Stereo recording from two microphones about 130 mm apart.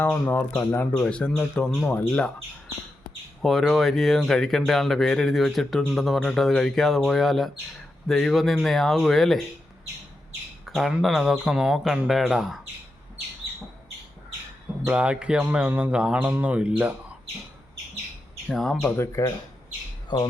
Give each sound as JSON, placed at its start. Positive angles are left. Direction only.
{"t": 0.0, "sound": "speech", "side_deg": 15}
{"t": 3.4, "sound": "speech", "side_deg": 0}
{"t": 10.7, "sound": "speech", "side_deg": 0}
{"t": 14.8, "sound": "speech", "side_deg": -10}
{"t": 18.4, "sound": "speech", "side_deg": 5}
{"t": 18.9, "sound": "speech", "side_deg": 25}
{"t": 20.1, "sound": "speech", "side_deg": 35}